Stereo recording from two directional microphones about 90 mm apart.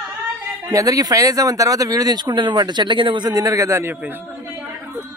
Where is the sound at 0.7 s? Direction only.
40° right (ahead or behind); by 4.6 s 20° right (ahead or behind).